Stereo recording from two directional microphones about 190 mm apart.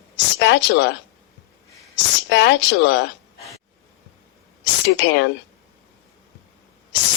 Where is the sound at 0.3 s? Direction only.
70° left (ahead or behind).